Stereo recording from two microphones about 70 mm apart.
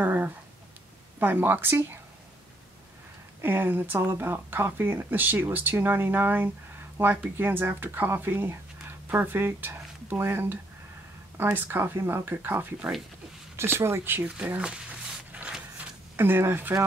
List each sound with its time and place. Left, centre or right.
0.0 s speech: right
3.3 s speech: right
14.4 s a sound: centre
16.2 s speech: right